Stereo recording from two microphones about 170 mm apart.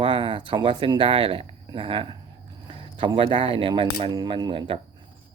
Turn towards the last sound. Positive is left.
turn(degrees=-30)  # may be behind; listen again after turning